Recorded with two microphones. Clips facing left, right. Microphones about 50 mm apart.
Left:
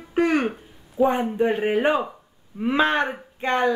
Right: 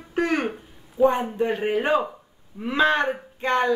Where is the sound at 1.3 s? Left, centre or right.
Centre.